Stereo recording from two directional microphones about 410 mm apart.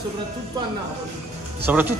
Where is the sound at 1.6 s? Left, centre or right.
Centre.